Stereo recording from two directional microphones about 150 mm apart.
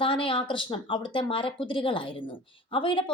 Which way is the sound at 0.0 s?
35° left (ahead or behind).